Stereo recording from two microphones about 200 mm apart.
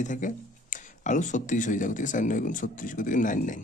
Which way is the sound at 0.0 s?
40° left (ahead or behind).